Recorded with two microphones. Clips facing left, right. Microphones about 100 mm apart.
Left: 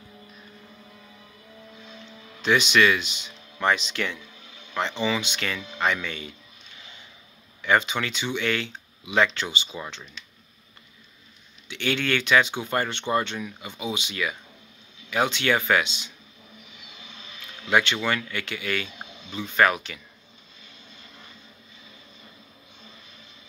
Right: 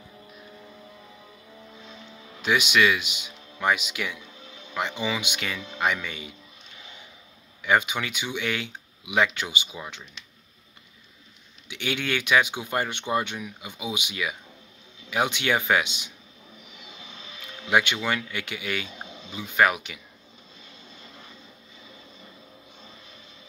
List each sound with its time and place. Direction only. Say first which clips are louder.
2.4 s speech: left 2 dB; 10° right (ahead or behind)
7.6 s speech: left 1 dB; 10° right (ahead or behind)
11.7 s speech: left 3 dB; 15° right (ahead or behind)
17.6 s speech: left 1 dB; 15° right (ahead or behind)